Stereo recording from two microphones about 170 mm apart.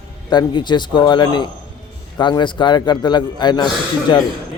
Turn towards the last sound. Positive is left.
turn(degrees=25)  # may be behind; listen again after turning